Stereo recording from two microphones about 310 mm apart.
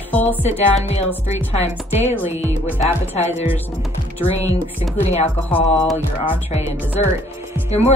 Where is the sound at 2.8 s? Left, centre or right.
Left.